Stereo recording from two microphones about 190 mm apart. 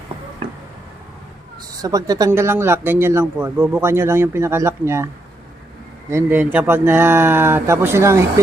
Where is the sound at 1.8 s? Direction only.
20° right (ahead or behind).